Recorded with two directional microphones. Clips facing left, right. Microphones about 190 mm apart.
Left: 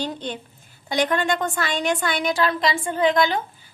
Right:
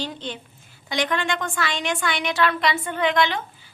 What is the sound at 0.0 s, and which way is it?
A woman's voice, 45° left (ahead or behind).